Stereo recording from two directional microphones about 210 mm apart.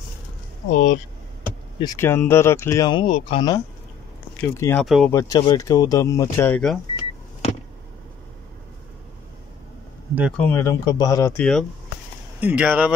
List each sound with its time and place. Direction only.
0.7 s speech: 40° left (ahead or behind)
1.8 s speech: 15° left (ahead or behind)
4.4 s speech: 10° left (ahead or behind)
4.8 s speech: centre (ahead or behind)
5.1 s speech: 15° left (ahead or behind)
10.3 s speech: 10° left (ahead or behind)
12.4 s speech: 5° right (ahead or behind)